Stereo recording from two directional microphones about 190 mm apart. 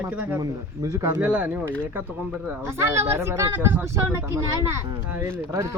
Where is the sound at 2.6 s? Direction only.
15° right (ahead or behind).